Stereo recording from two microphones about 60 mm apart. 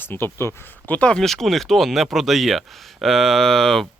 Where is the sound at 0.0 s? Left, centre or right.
Left.